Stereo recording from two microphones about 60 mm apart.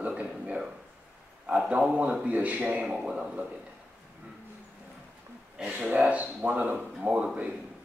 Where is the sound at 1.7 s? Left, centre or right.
Right.